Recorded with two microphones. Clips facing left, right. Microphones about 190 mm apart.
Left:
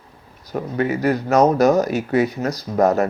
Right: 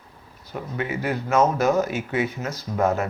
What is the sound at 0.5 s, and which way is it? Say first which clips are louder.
Speech: left 7 dB; 40° left (ahead or behind).